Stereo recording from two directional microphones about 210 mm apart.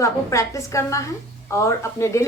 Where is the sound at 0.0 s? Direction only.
15° left (ahead or behind).